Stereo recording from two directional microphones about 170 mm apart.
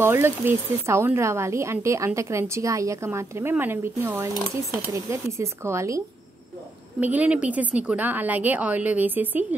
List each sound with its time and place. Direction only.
0.0 s speech: 15° right (ahead or behind)